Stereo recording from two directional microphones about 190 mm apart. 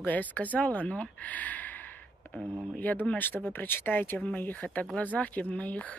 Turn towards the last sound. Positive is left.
turn(degrees=10)  # may be behind; listen again after turning